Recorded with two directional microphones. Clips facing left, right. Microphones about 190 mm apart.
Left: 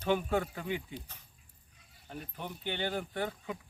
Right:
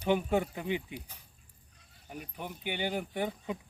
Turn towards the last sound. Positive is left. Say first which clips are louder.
# right 2 dB
turn(degrees=-15)  # may be behind; listen again after turning